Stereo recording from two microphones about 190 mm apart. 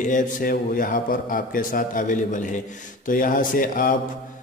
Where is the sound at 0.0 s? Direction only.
45° left (ahead or behind).